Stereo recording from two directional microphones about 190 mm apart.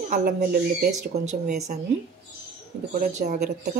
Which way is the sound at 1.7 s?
45° right (ahead or behind).